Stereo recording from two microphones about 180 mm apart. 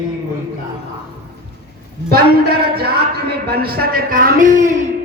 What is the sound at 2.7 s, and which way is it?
Speech, 60° right (ahead or behind).